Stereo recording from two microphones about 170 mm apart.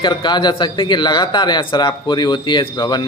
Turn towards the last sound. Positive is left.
turn(degrees=25)  # may be behind; listen again after turning